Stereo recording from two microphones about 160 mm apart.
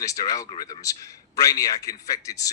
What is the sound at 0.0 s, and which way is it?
A man's voice, 20° left (ahead or behind).